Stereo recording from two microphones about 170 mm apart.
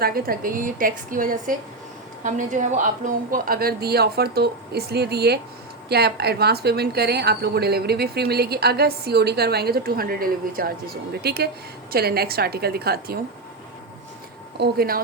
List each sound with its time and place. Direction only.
0.0 s a woman's voice: 60° right (ahead or behind)
14.6 s a woman's voice: 65° right (ahead or behind)